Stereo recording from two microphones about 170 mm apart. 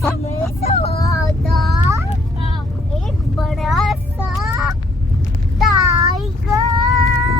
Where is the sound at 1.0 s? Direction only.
20° left (ahead or behind).